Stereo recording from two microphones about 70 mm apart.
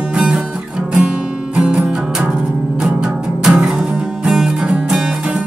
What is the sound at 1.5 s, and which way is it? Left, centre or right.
Music, centre.